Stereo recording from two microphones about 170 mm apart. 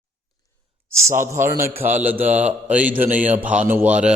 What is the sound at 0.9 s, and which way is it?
Speech, 15° right (ahead or behind).